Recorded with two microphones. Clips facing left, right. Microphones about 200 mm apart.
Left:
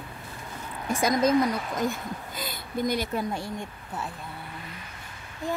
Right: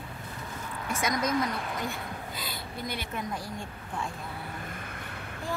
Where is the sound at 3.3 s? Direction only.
25° left (ahead or behind).